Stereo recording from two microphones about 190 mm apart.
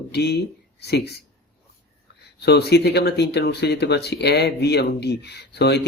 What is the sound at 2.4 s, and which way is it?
A man's voice, 60° left (ahead or behind).